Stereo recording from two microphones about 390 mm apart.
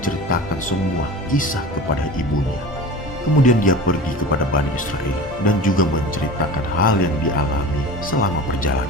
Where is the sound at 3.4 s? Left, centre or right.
Left.